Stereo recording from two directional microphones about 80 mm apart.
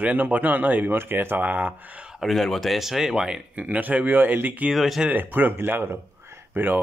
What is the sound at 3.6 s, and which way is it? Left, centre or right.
Speech, right.